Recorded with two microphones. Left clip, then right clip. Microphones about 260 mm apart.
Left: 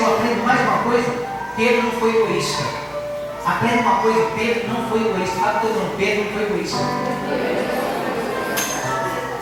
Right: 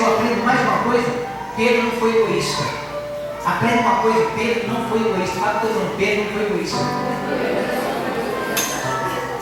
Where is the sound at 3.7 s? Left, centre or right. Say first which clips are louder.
Even; centre.